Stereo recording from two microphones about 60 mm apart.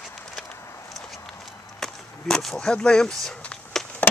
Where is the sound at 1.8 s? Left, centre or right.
Centre.